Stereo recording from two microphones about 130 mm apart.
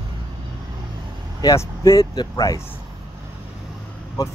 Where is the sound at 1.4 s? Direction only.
25° left (ahead or behind).